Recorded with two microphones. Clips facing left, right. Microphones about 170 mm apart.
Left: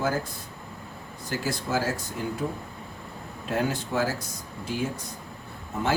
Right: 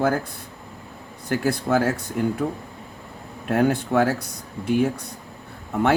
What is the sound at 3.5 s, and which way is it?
Speech, 60° right (ahead or behind).